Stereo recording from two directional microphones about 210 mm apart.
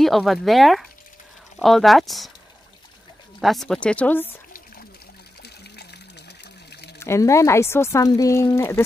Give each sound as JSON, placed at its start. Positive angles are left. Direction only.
{"t": 0.0, "sound": "speech", "side_deg": 0}
{"t": 3.3, "sound": "speech", "side_deg": 0}
{"t": 6.7, "sound": "a sound", "side_deg": 50}
{"t": 7.0, "sound": "speech", "side_deg": 15}